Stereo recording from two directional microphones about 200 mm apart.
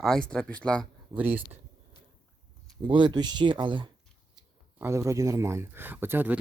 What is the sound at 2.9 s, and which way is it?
Speech, 25° right (ahead or behind).